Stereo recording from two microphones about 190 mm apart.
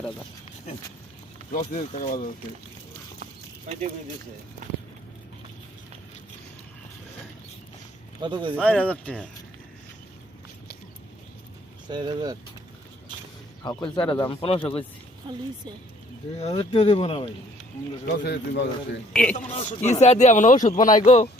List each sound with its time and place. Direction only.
1.5 s speech: 40° left (ahead or behind)
3.7 s speech: 40° right (ahead or behind)
8.2 s speech: 25° right (ahead or behind)
8.6 s speech: 5° left (ahead or behind)
11.9 s speech: 25° right (ahead or behind)
13.6 s speech: 20° left (ahead or behind)
15.3 s speech: 25° right (ahead or behind)
16.4 s speech: 30° left (ahead or behind)
18.0 s speech: 60° left (ahead or behind)
19.1 s a man's voice: 5° left (ahead or behind)
19.5 s speech: 35° left (ahead or behind)